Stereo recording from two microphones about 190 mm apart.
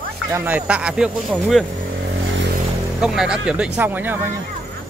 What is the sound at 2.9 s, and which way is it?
Speech, 5° right (ahead or behind).